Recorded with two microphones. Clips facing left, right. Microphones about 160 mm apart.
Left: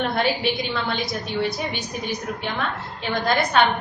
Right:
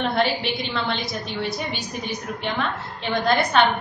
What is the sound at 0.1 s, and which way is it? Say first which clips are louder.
Speech: even; centre (ahead or behind).